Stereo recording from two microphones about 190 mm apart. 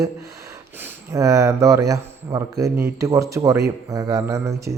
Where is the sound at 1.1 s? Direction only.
15° right (ahead or behind).